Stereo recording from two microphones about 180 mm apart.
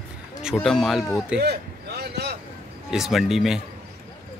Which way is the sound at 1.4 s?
65° right (ahead or behind).